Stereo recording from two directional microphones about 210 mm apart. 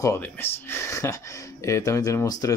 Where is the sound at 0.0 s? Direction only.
10° left (ahead or behind).